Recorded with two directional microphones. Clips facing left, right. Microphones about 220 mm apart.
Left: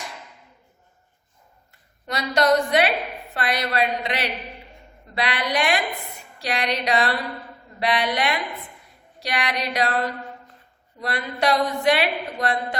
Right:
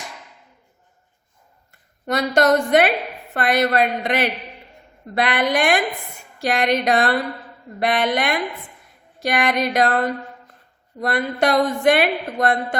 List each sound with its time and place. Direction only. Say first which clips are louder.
2.0 s a woman's voice: right 3 dB; 50° right (ahead or behind)